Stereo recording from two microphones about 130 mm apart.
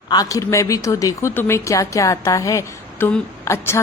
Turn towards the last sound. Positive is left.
turn(degrees=20)  # may be behind; listen again after turning